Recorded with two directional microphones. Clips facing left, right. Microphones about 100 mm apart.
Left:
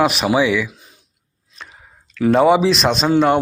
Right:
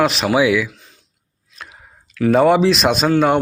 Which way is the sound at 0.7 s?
20° left (ahead or behind).